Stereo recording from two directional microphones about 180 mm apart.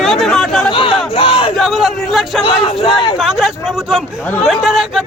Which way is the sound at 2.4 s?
30° left (ahead or behind).